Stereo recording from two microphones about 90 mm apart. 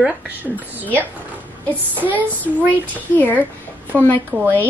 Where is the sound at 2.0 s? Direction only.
20° right (ahead or behind).